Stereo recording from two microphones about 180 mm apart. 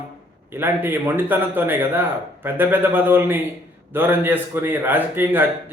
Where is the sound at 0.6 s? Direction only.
10° right (ahead or behind).